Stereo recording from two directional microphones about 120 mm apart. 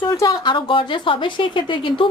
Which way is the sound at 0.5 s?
45° left (ahead or behind).